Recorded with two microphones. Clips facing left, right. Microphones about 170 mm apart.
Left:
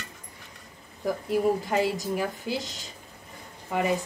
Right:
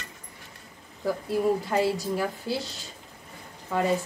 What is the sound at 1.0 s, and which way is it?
Speech, 15° left (ahead or behind).